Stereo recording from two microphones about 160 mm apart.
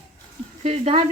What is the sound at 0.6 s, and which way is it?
Speech, 40° right (ahead or behind).